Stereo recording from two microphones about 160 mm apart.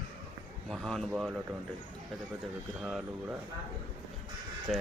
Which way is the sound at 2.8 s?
5° right (ahead or behind).